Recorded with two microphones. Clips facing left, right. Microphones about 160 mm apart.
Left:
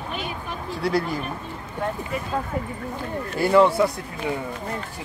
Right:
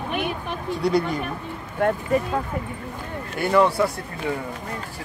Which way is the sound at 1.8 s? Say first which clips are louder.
Right 7 dB; 65° right (ahead or behind).